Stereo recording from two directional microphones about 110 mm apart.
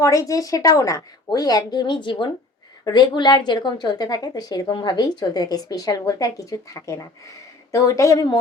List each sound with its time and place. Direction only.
0.0 s a woman's voice: 30° left (ahead or behind)